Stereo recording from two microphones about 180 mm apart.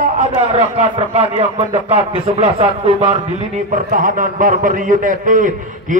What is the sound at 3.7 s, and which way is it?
A man's voice, 50° right (ahead or behind).